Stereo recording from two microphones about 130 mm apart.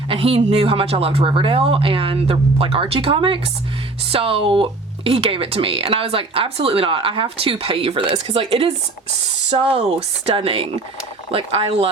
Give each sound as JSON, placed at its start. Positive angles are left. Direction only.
{"t": 0.1, "sound": "speech", "side_deg": -45}